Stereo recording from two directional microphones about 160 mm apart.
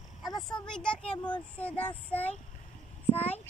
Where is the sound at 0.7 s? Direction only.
5° left (ahead or behind).